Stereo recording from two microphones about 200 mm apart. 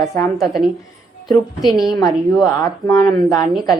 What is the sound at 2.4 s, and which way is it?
Speech, 15° left (ahead or behind).